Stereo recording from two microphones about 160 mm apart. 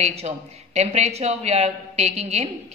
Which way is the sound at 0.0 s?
40° right (ahead or behind).